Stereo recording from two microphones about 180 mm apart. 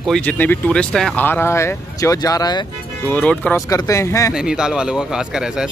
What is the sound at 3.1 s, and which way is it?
Speech, 10° left (ahead or behind).